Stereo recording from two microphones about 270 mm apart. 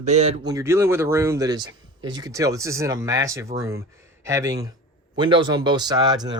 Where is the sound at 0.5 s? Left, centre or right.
Centre.